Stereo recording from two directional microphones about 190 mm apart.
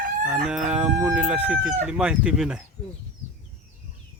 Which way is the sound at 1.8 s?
5° right (ahead or behind).